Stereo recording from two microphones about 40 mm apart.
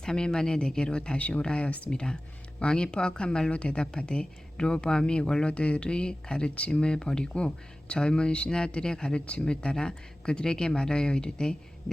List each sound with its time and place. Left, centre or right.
0.0 s speech: centre; by 1.9 s left
1.9 s speech: left